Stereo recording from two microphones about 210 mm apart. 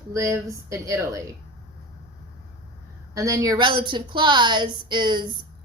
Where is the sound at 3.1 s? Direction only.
15° right (ahead or behind).